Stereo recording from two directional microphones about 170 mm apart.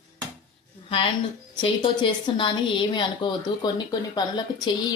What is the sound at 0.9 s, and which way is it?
A woman's voice, 35° left (ahead or behind).